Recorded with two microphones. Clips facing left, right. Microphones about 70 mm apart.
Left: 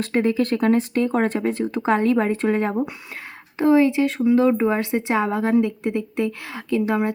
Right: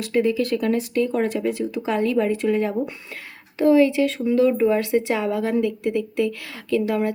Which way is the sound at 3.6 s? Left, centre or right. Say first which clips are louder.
Even; left.